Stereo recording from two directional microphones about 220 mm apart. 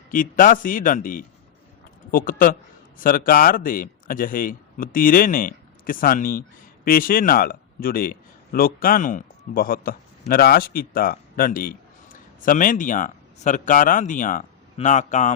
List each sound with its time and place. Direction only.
0.1 s a man's voice: 40° left (ahead or behind)